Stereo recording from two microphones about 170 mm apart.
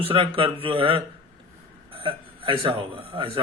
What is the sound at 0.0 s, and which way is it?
A man's voice, 30° right (ahead or behind).